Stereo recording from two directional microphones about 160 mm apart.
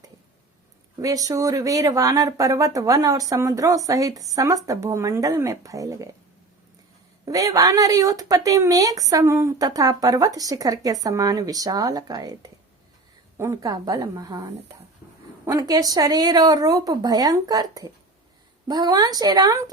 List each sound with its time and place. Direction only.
0.9 s speech: 20° right (ahead or behind)
7.3 s speech: 20° right (ahead or behind)
15.4 s speech: 20° right (ahead or behind)